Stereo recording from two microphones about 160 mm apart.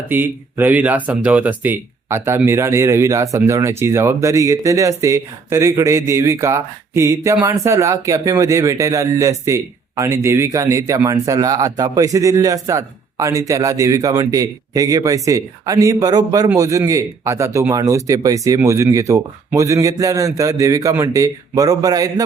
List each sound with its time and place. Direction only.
0.1 s speech: 10° right (ahead or behind)